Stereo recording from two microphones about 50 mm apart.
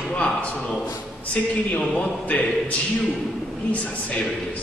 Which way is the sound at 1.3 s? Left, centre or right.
Left.